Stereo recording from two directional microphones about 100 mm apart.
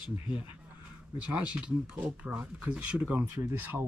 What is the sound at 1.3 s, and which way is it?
Speech, 10° right (ahead or behind).